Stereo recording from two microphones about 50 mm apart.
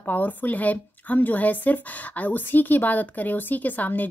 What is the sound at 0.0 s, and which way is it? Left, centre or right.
A woman's voice, left.